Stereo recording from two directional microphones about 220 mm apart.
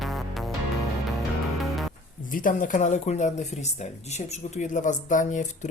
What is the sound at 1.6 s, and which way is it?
Music, centre (ahead or behind).